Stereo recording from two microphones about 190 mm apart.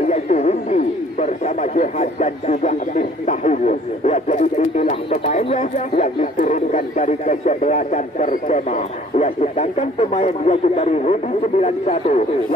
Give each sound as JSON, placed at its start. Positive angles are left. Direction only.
{"t": 0.0, "sound": "speech", "side_deg": 35}